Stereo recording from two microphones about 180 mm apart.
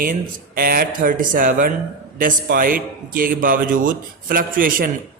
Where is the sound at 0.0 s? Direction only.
55° right (ahead or behind).